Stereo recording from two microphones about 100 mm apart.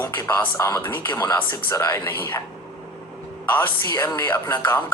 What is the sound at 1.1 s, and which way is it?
Speech, 40° left (ahead or behind).